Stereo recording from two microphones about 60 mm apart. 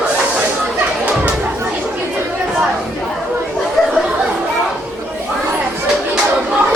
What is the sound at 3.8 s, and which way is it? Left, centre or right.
Chatter, centre.